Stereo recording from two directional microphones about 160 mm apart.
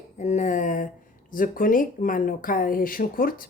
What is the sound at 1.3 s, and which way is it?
A woman's voice, 60° left (ahead or behind).